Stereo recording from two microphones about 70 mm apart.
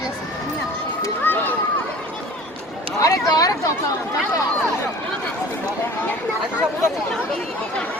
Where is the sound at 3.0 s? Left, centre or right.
Left.